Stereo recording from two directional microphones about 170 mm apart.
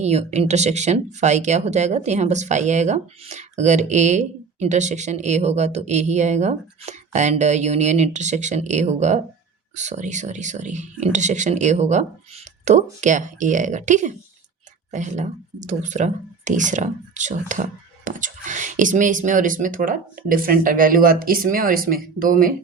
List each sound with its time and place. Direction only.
0.0 s speech: 40° right (ahead or behind); by 22.5 s 55° right (ahead or behind)